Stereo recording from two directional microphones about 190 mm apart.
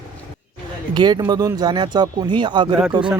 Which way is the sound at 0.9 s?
20° right (ahead or behind).